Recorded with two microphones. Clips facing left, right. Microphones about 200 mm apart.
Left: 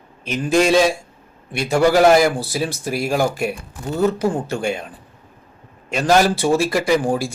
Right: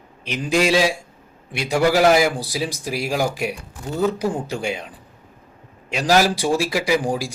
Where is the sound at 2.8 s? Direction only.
50° left (ahead or behind).